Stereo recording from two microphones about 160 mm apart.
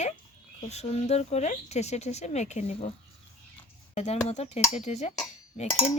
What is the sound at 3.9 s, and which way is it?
A woman's voice, 45° left (ahead or behind).